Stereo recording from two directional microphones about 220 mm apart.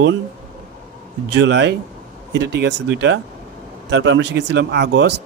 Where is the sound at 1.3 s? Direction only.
50° right (ahead or behind).